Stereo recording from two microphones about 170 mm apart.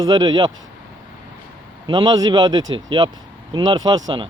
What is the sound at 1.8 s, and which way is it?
Speech, 25° right (ahead or behind).